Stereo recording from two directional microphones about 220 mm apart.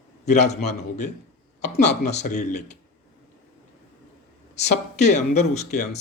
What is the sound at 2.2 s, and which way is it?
Speech, 35° left (ahead or behind).